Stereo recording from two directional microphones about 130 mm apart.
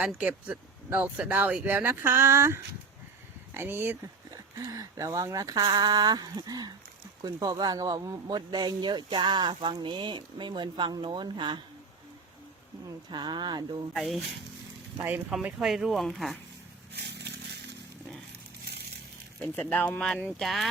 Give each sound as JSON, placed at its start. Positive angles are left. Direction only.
{"t": 0.0, "sound": "speech", "side_deg": -10}
{"t": 13.1, "sound": "speech", "side_deg": -35}
{"t": 13.9, "sound": "speech", "side_deg": 0}
{"t": 19.4, "sound": "speech", "side_deg": 10}